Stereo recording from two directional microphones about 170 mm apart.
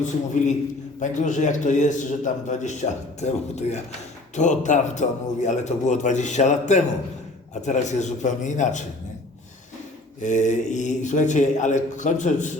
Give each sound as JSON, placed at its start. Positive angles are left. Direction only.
{"t": 0.0, "sound": "a man's voice", "side_deg": 45}
{"t": 10.2, "sound": "a man's voice", "side_deg": 45}